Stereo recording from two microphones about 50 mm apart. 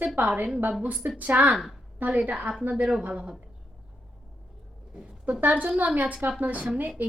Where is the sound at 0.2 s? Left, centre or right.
Right.